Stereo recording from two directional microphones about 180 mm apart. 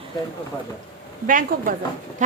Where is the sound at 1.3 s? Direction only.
50° right (ahead or behind).